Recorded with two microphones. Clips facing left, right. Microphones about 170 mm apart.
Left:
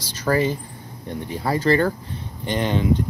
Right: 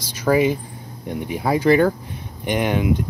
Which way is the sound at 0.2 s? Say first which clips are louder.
Right 3 dB; 10° right (ahead or behind).